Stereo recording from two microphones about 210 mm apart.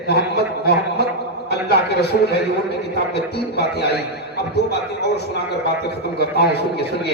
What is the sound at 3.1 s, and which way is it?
A man's voice, 50° left (ahead or behind).